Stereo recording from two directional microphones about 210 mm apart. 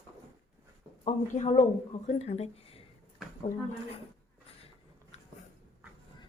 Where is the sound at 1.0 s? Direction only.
30° left (ahead or behind).